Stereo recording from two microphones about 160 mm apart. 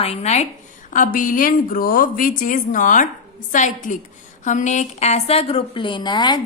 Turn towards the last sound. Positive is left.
turn(degrees=25)  # may be behind; listen again after turning